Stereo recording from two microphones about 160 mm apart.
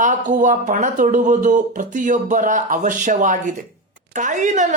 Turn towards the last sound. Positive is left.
turn(degrees=-50)  # may be behind; listen again after turning